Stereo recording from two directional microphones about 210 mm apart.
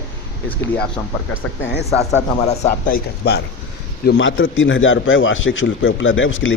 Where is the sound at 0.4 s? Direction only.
10° left (ahead or behind).